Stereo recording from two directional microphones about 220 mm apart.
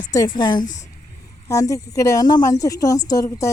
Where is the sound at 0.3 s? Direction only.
20° left (ahead or behind).